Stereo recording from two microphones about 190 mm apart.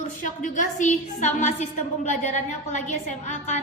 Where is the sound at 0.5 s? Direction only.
40° left (ahead or behind).